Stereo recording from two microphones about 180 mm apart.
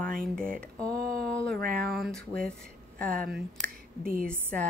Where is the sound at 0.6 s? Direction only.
5° left (ahead or behind).